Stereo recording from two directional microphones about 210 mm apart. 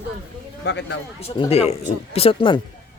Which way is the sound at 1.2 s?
30° left (ahead or behind).